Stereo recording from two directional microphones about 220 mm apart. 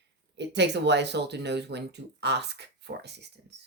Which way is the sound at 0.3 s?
50° right (ahead or behind).